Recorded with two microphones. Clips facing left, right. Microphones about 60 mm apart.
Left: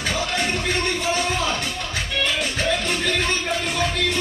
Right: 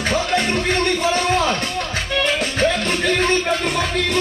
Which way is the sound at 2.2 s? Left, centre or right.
Right.